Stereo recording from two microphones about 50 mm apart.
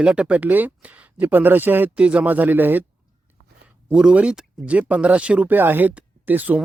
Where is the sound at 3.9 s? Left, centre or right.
Centre.